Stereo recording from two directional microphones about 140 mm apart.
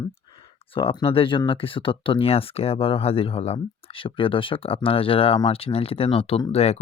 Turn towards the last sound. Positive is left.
turn(degrees=50)  # may be behind; listen again after turning